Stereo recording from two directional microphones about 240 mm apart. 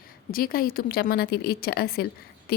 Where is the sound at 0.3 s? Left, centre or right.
Left.